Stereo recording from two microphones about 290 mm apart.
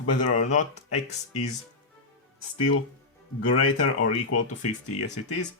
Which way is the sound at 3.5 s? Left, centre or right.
Left.